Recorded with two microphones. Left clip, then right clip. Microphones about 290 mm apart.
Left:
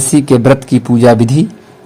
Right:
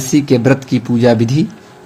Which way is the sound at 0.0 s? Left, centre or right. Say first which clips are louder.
Left 3 dB; left.